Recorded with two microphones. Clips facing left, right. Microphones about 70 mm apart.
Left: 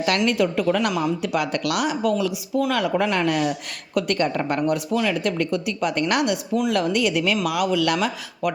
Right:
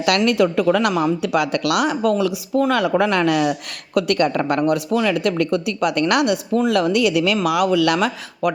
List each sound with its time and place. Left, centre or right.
0.3 s speech: right
3.0 s speech: right